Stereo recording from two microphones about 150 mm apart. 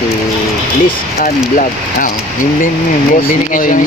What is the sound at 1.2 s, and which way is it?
Speech, 65° left (ahead or behind).